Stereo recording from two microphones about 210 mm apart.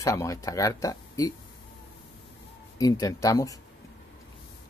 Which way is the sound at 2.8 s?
15° left (ahead or behind).